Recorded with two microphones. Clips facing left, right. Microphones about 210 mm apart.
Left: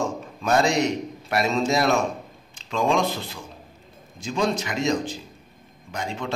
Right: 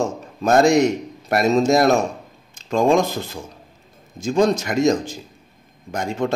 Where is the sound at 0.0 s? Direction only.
45° right (ahead or behind).